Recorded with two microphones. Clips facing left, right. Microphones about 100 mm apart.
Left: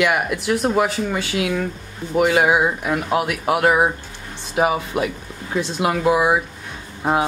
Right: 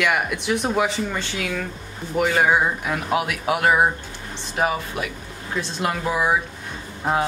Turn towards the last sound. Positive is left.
turn(degrees=10)  # may be behind; listen again after turning